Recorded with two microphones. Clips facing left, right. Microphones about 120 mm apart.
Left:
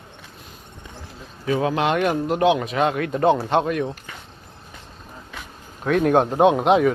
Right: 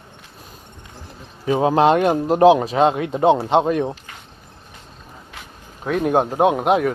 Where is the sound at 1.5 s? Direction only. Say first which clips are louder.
Right 6 dB; 30° right (ahead or behind).